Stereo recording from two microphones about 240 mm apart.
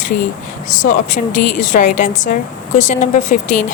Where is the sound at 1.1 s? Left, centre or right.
Left.